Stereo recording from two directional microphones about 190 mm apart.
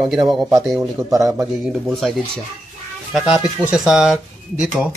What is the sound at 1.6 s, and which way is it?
Speech, centre (ahead or behind).